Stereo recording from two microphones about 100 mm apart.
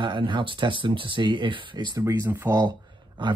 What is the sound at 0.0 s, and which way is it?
Speech, 50° right (ahead or behind).